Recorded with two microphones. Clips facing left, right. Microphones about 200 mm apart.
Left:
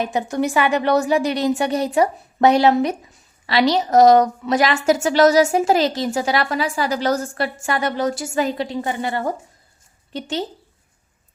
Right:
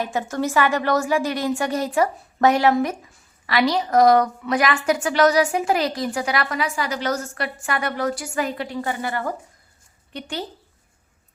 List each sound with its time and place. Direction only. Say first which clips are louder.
0.0 s a woman's voice: left 3 dB; 20° left (ahead or behind)